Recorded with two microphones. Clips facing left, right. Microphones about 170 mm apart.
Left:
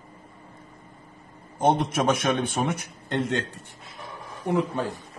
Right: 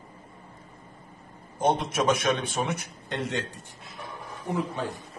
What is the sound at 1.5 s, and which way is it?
A man's voice, 50° left (ahead or behind).